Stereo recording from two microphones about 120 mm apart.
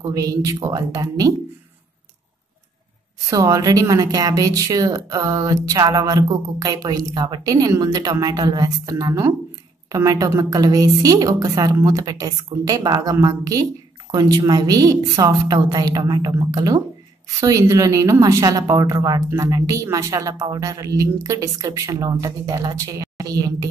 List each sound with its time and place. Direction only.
0.0 s a woman's voice: 30° right (ahead or behind)
3.3 s a woman's voice: 30° right (ahead or behind)